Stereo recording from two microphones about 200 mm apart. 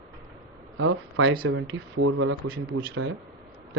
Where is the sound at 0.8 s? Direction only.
85° right.